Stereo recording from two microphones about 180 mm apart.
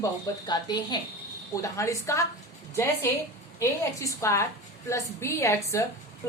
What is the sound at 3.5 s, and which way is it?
A woman's voice, 15° left (ahead or behind).